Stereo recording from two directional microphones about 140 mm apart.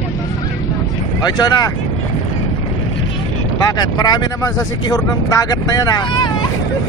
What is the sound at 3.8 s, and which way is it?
Speech, 30° left (ahead or behind).